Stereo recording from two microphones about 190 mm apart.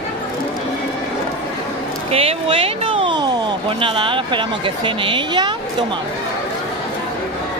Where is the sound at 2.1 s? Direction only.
30° right (ahead or behind).